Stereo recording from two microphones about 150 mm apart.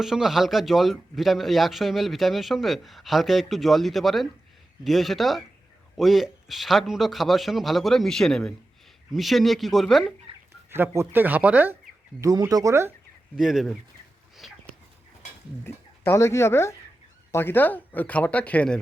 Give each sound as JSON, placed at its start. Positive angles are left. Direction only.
{"t": 0.0, "sound": "speech", "side_deg": -5}
{"t": 10.7, "sound": "speech", "side_deg": -15}
{"t": 12.2, "sound": "speech", "side_deg": -25}
{"t": 13.3, "sound": "speech", "side_deg": -5}
{"t": 15.6, "sound": "speech", "side_deg": 15}